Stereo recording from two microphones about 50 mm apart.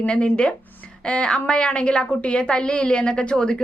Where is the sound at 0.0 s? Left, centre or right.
Left.